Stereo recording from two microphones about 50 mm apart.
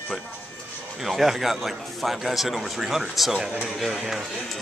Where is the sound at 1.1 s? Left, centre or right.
Centre.